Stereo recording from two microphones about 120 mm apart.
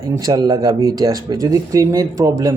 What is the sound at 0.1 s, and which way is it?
A man's voice, 30° right (ahead or behind).